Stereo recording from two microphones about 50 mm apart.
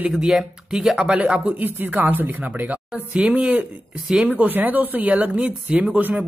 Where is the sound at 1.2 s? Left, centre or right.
Right.